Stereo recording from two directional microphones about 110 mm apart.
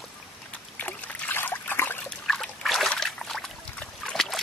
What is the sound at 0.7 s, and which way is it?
Trickle, 15° left (ahead or behind).